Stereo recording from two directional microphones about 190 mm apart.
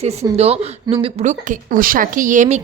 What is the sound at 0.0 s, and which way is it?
A woman's voice, 35° right (ahead or behind).